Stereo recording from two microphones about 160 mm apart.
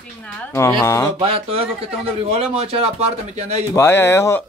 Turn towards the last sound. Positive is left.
turn(degrees=15)  # may be behind; listen again after turning